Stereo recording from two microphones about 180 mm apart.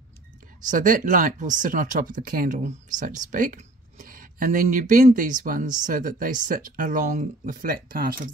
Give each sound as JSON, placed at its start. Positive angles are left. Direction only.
{"t": 0.7, "sound": "speech", "side_deg": -50}